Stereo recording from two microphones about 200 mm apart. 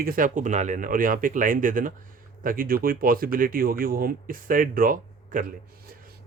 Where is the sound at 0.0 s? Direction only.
45° right (ahead or behind).